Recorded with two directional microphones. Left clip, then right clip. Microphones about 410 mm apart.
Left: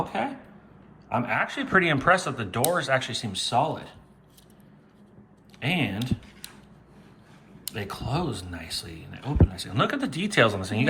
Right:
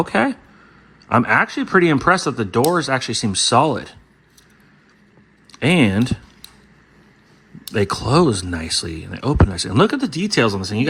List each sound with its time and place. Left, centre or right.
0.0 s speech: centre
5.5 s speech: centre
7.7 s speech: centre